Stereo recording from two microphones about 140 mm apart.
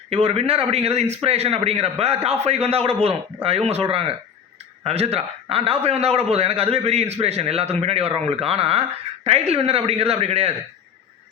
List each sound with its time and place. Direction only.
0.1 s a man's voice: 45° right (ahead or behind)